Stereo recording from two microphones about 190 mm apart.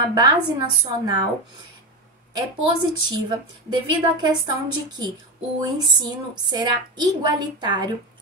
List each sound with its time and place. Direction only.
0.1 s a woman's voice: 20° right (ahead or behind)
2.3 s a woman's voice: 20° right (ahead or behind)